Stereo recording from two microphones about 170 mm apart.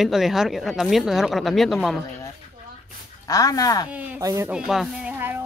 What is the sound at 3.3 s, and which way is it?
Speech, 20° left (ahead or behind).